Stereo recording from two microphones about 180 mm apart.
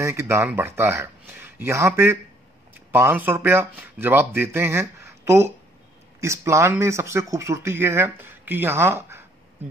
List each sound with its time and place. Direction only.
0.0 s speech: 15° right (ahead or behind)